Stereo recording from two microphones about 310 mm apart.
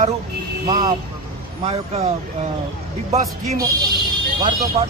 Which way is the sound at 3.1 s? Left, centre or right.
Centre.